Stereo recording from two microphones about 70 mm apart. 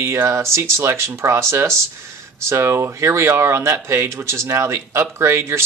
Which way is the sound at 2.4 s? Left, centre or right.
Right.